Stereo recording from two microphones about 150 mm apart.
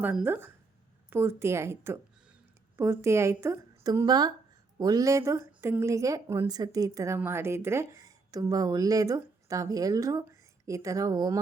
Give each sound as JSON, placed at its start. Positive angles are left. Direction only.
{"t": 0.0, "sound": "a woman's voice", "side_deg": -10}